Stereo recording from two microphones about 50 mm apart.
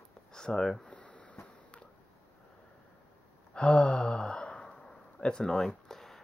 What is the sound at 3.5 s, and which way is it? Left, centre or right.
Sigh, left.